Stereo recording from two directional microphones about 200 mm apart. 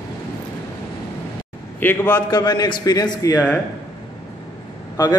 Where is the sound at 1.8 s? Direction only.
10° left (ahead or behind).